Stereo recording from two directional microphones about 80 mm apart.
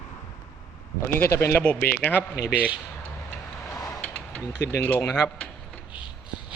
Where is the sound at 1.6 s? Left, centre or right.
Centre.